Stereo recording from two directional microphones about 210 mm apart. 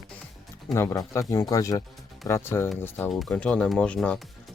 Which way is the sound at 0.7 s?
15° left (ahead or behind).